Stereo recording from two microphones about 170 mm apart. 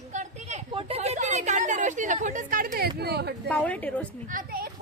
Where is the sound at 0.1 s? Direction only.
45° right (ahead or behind); by 2.9 s 60° right (ahead or behind).